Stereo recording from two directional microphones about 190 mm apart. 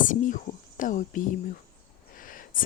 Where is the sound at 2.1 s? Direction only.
45° left (ahead or behind).